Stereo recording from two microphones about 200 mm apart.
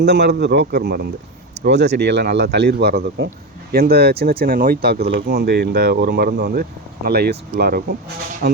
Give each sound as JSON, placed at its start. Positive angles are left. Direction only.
{"t": 0.0, "sound": "speech", "side_deg": -55}